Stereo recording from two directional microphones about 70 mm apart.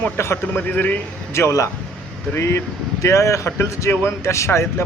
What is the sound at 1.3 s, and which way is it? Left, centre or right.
Speech, left.